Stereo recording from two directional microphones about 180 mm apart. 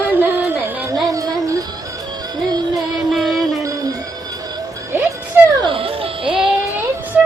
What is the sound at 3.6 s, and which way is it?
Music, 20° right (ahead or behind).